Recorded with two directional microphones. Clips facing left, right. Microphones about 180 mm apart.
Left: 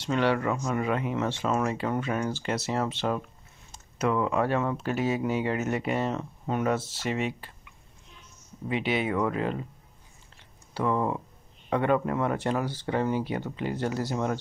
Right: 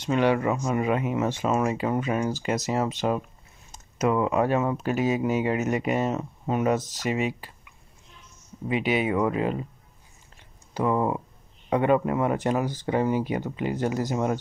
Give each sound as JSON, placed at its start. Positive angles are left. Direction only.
{"t": 0.0, "sound": "speech", "side_deg": -15}
{"t": 8.6, "sound": "speech", "side_deg": -10}
{"t": 10.7, "sound": "speech", "side_deg": -15}